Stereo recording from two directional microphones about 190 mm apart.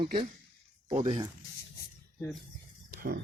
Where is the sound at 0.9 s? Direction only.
30° right (ahead or behind).